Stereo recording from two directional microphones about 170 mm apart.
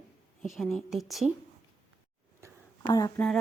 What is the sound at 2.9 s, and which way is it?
Speech, 20° left (ahead or behind).